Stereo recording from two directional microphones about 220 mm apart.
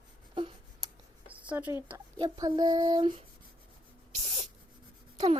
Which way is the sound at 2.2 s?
15° right (ahead or behind).